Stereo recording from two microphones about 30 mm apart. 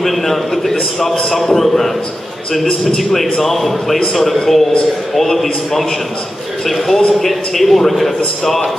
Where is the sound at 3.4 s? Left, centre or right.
Centre.